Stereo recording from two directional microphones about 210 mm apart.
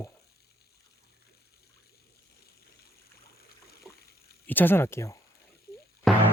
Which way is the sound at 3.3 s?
50° left (ahead or behind).